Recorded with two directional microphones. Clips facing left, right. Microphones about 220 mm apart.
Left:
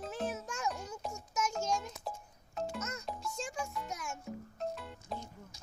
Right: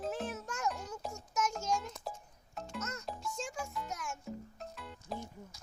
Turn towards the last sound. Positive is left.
turn(degrees=0)  # may be behind; listen again after turning